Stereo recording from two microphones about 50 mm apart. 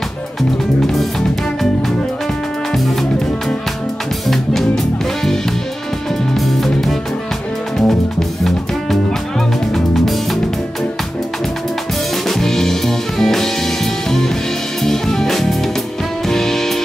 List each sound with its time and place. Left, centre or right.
0.4 s music: centre
2.7 s music: centre
12.3 s music: centre